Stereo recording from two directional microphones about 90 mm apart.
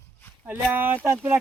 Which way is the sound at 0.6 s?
20° right (ahead or behind).